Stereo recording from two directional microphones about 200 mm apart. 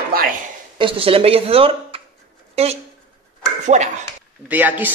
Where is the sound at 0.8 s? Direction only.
25° right (ahead or behind).